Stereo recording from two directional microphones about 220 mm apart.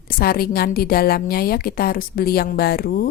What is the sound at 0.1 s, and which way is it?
A woman's voice, 45° left (ahead or behind).